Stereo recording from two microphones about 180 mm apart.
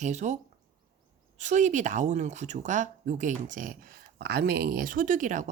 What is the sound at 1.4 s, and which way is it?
Speech, 40° right (ahead or behind).